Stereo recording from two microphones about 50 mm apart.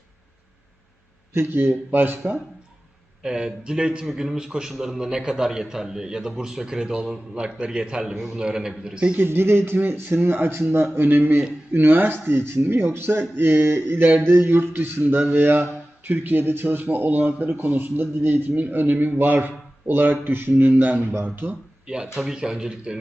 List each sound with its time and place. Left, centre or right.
1.3 s speech: right
1.7 s speech: right
3.2 s a man's voice: centre
4.0 s a man's voice: centre
4.4 s a man's voice: centre
8.1 s a man's voice: centre
9.1 s a man's voice: right
14.4 s a man's voice: right
21.8 s a man's voice: centre